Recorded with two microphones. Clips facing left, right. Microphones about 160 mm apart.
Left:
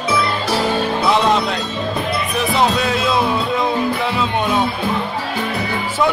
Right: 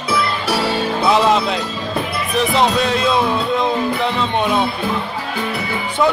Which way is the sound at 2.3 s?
Centre (ahead or behind).